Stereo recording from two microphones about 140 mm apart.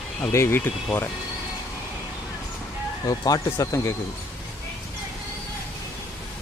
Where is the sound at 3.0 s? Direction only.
25° left (ahead or behind).